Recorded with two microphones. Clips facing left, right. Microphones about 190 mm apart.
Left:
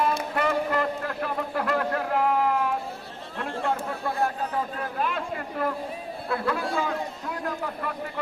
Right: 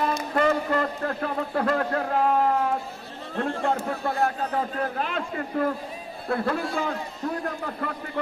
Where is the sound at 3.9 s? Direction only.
40° right (ahead or behind).